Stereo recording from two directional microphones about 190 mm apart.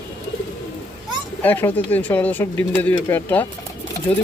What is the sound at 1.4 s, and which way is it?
Speech, 10° left (ahead or behind).